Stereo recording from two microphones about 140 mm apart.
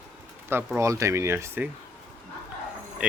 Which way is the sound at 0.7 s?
20° right (ahead or behind).